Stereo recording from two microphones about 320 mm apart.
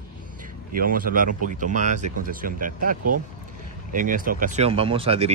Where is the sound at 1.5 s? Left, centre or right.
Right.